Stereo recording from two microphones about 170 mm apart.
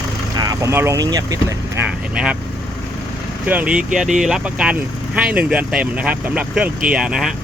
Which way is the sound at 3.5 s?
10° right (ahead or behind).